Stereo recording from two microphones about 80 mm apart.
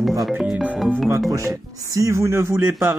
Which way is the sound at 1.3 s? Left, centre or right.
Right.